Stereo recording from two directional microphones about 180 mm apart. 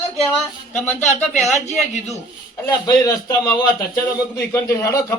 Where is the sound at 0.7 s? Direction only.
10° left (ahead or behind).